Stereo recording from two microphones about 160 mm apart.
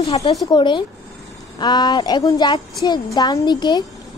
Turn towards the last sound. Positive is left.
turn(degrees=25)  # may be behind; listen again after turning